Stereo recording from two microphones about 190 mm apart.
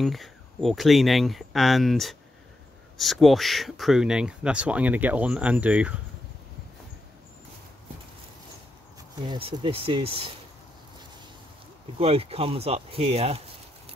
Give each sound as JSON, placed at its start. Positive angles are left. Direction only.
{"t": 0.0, "sound": "speech", "side_deg": 0}
{"t": 9.2, "sound": "speech", "side_deg": -25}
{"t": 12.0, "sound": "speech", "side_deg": -30}